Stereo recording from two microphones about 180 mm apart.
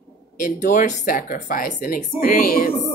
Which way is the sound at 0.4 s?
45° left (ahead or behind).